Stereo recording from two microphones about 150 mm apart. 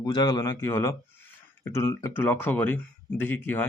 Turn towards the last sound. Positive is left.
turn(degrees=10)  # may be behind; listen again after turning